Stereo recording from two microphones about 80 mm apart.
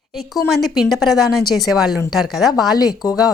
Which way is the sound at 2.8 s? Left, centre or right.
Left.